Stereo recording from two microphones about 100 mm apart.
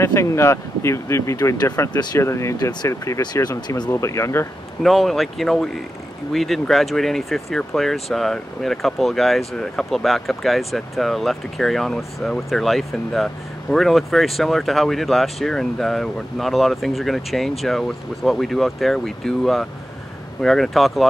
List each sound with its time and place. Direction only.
0.0 s speech: 30° left (ahead or behind)
3.4 s speech: 45° left (ahead or behind)
3.9 s speech: 30° left (ahead or behind)
4.8 s speech: centre (ahead or behind)